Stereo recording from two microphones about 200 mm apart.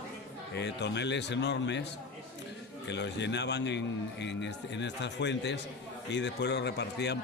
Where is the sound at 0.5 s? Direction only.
60° left (ahead or behind).